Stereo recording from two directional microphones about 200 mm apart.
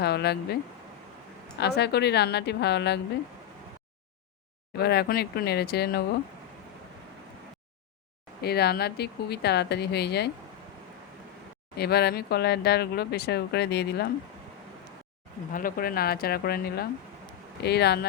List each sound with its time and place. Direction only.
0.0 s speech: 55° left (ahead or behind)
1.5 s speech: 55° left (ahead or behind)
4.8 s speech: 55° left (ahead or behind)
8.4 s speech: 50° left (ahead or behind)
11.8 s speech: 50° left (ahead or behind)
15.5 s speech: 45° left (ahead or behind)